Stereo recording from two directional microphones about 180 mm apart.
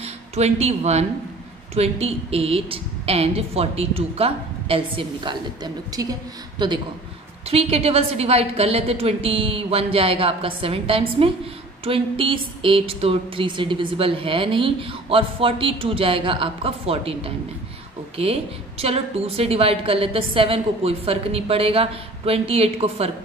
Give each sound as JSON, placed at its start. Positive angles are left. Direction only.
{"t": 0.0, "sound": "a woman's voice", "side_deg": -35}